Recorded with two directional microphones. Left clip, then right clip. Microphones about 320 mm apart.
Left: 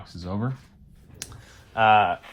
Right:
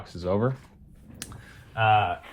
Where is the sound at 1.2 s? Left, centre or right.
Centre.